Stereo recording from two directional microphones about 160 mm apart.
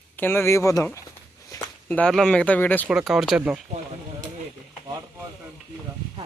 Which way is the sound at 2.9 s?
5° right (ahead or behind).